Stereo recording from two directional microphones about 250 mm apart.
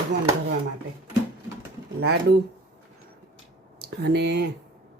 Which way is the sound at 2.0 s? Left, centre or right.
Right.